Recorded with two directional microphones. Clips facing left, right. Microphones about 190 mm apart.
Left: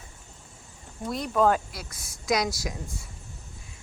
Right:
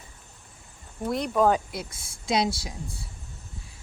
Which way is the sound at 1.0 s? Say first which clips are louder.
Right 1 dB; 5° right (ahead or behind).